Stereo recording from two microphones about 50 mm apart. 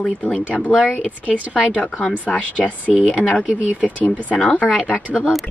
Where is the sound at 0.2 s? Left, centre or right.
Left.